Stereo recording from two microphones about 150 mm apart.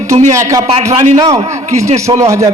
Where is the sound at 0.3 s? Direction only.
20° right (ahead or behind).